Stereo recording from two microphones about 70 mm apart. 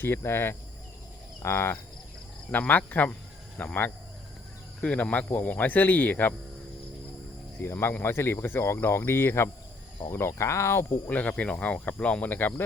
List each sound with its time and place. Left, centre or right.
0.0 s speech: left
2.5 s speech: left
7.6 s speech: left
11.1 s speech: left